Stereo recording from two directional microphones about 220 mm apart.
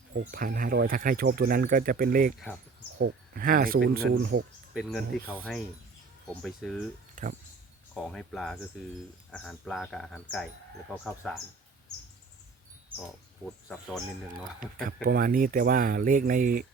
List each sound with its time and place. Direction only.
0.1 s speech: 40° right (ahead or behind)
4.7 s speech: centre (ahead or behind)
7.2 s speech: 35° right (ahead or behind)
7.9 s speech: centre (ahead or behind)
13.4 s speech: 5° left (ahead or behind)
15.0 s speech: 40° right (ahead or behind)